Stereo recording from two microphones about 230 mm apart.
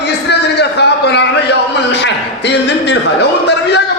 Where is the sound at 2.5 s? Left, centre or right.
Left.